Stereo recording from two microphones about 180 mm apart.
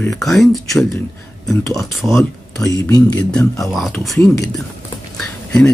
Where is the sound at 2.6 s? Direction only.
20° left (ahead or behind).